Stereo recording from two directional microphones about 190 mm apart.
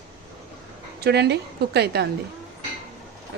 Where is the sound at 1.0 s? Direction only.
60° right (ahead or behind).